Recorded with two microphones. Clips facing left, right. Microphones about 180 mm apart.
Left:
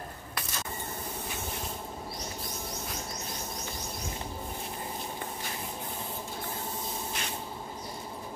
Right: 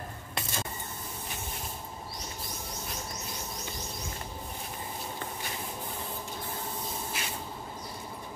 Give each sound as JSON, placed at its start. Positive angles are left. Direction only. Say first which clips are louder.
{"t": 0.3, "sound": "spray", "louder": "right 3 dB", "side_deg": -25}
{"t": 7.2, "sound": "spray", "louder": "even", "side_deg": -5}